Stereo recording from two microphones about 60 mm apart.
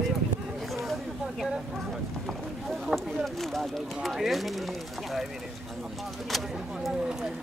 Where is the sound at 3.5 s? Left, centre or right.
Centre.